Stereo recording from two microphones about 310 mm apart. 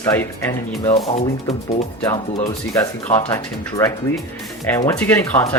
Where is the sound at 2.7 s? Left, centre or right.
Centre.